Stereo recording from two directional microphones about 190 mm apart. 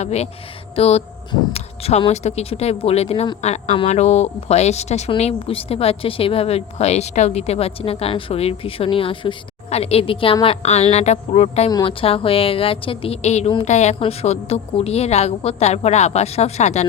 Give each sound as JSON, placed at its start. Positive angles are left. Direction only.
{"t": 0.0, "sound": "speech", "side_deg": 35}